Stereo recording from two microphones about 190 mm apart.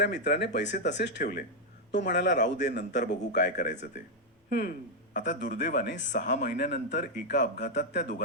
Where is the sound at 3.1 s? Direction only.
65° left (ahead or behind).